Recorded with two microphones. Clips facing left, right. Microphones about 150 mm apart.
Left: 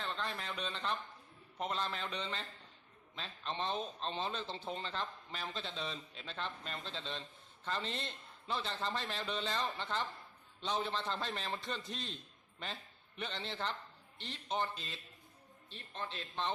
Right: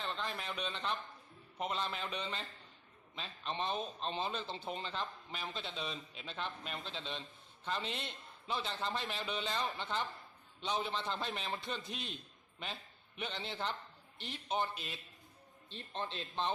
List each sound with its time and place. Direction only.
0.0 s a man's voice: 5° right (ahead or behind)
13.1 s a man's voice: 10° right (ahead or behind)
15.7 s speech: 30° right (ahead or behind)